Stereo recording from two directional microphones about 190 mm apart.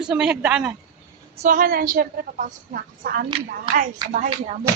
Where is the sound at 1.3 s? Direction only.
45° right (ahead or behind).